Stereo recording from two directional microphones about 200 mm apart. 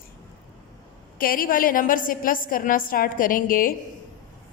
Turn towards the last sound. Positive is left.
turn(degrees=45)  # may be behind; listen again after turning